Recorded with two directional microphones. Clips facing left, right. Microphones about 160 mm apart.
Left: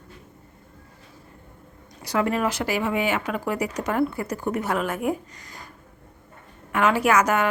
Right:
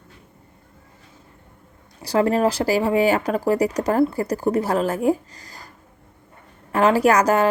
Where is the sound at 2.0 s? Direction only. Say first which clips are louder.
Right 5 dB; 35° right (ahead or behind).